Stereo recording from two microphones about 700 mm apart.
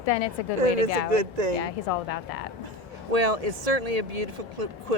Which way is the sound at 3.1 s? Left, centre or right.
Right.